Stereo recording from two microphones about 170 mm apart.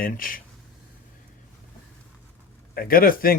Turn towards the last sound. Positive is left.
turn(degrees=60)  # may be behind; listen again after turning